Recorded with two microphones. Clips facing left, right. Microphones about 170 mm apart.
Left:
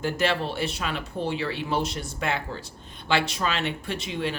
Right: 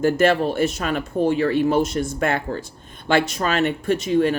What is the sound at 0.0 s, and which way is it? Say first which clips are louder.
Speech: right 8 dB; 50° right (ahead or behind).